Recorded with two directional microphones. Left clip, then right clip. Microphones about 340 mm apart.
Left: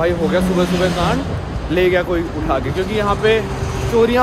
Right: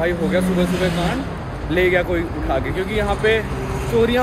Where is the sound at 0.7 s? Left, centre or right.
Left.